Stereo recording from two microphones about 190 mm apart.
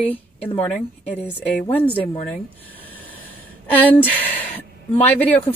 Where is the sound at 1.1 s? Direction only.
10° left (ahead or behind).